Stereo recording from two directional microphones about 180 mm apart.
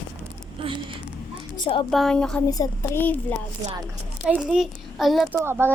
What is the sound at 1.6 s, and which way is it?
Speech, 25° left (ahead or behind).